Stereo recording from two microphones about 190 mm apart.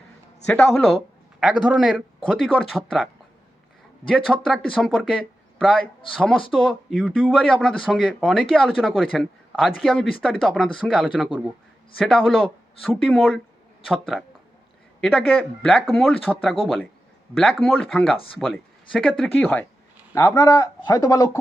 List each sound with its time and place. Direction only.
0.4 s speech: 5° left (ahead or behind)
4.1 s a man's voice: centre (ahead or behind); by 21.2 s 15° left (ahead or behind)